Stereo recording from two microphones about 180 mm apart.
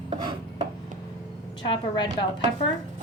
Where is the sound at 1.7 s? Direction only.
25° left (ahead or behind).